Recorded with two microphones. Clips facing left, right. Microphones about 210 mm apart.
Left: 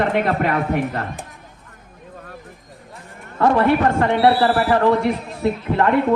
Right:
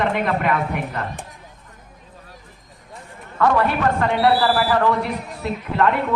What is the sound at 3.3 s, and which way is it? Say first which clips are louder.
Speech: left 3 dB; 30° left (ahead or behind).